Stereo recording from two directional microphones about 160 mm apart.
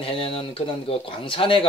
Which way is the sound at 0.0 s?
35° left (ahead or behind).